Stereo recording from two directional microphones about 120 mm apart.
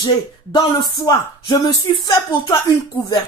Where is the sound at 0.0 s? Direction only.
35° left (ahead or behind).